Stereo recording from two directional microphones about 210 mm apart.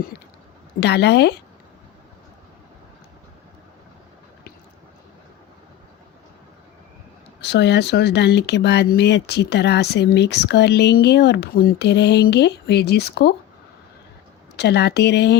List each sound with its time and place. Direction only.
0.8 s speech: 55° left (ahead or behind)
7.4 s speech: 55° left (ahead or behind)
14.5 s speech: 50° left (ahead or behind)